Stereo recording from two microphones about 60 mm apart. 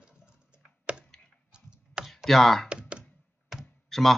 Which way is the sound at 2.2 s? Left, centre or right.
Centre.